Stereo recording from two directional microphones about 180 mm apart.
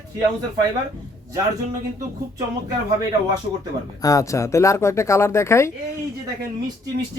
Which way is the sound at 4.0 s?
20° left (ahead or behind).